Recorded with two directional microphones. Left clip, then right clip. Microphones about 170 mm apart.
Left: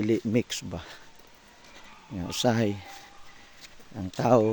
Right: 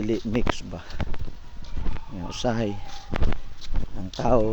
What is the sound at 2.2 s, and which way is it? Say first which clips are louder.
Speech: left 1 dB; 25° left (ahead or behind).